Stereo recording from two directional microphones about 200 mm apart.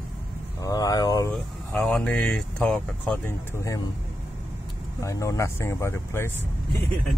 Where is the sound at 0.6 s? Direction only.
15° left (ahead or behind).